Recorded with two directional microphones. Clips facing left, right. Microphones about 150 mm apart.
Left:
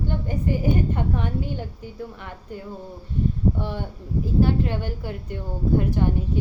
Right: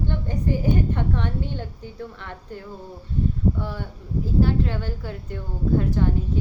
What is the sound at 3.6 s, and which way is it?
A woman's voice, 20° left (ahead or behind).